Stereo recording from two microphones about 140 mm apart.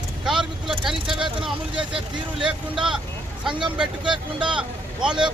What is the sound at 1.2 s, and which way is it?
Speech, 35° right (ahead or behind).